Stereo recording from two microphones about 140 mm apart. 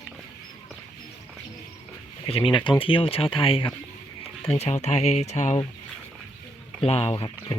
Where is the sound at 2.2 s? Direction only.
40° left (ahead or behind); by 5.6 s 55° left (ahead or behind).